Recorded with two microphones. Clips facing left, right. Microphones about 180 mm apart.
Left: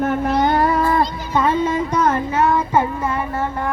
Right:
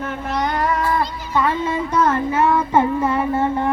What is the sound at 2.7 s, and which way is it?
Child singing, 25° right (ahead or behind).